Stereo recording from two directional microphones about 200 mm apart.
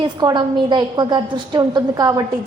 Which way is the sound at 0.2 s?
20° right (ahead or behind).